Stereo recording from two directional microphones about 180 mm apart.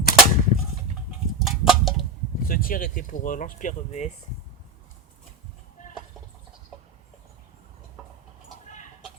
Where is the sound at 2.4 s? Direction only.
55° left (ahead or behind).